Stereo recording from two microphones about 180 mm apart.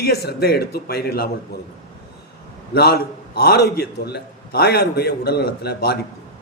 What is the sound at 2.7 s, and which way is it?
A man's voice, 65° left (ahead or behind).